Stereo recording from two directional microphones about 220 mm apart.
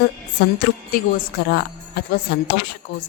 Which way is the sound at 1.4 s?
45° left (ahead or behind).